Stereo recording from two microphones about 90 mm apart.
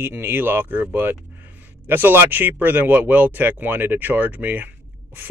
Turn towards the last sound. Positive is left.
turn(degrees=-20)  # may be behind; listen again after turning